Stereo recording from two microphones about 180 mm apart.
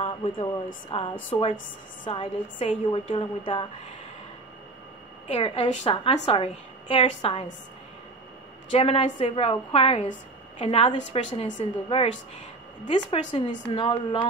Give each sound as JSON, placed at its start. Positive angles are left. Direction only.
{"t": 0.0, "sound": "a woman's voice", "side_deg": 30}
{"t": 5.3, "sound": "a woman's voice", "side_deg": 30}
{"t": 8.7, "sound": "a woman's voice", "side_deg": 30}